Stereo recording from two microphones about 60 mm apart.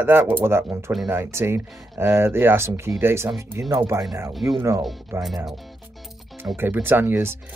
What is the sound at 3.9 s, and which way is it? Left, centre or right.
Speech, right.